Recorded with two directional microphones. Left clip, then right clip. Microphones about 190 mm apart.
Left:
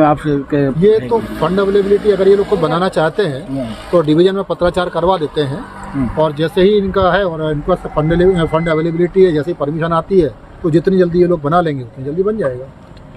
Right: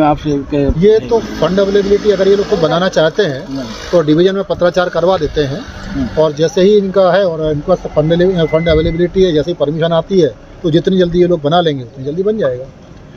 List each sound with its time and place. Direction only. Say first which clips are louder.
0.0 s speech: even; 25° left (ahead or behind)
0.7 s speech: right 3 dB; 5° left (ahead or behind)